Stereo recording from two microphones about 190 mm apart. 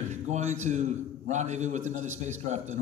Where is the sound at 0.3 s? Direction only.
35° right (ahead or behind).